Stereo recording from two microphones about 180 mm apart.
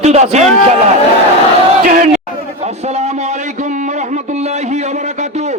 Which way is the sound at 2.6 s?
40° right (ahead or behind).